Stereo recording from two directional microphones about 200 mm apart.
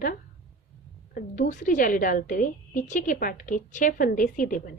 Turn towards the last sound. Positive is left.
turn(degrees=40)  # may be behind; listen again after turning